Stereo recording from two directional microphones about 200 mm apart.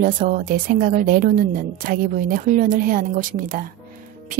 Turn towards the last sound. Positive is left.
turn(degrees=-45)  # may be behind; listen again after turning